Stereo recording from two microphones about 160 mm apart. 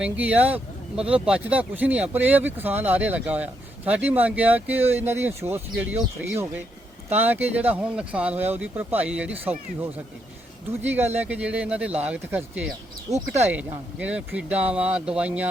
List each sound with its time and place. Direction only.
0.0 s speech: 10° right (ahead or behind)
10.7 s speech: 15° right (ahead or behind)
13.1 s speech: 45° right (ahead or behind)
13.5 s speech: 10° right (ahead or behind)